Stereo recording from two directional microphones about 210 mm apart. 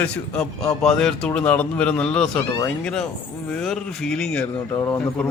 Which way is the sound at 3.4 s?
Centre (ahead or behind).